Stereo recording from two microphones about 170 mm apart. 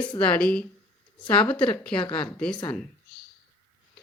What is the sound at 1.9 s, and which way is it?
Speech, 30° left (ahead or behind).